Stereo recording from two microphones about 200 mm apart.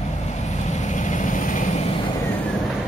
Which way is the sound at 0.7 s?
35° left (ahead or behind).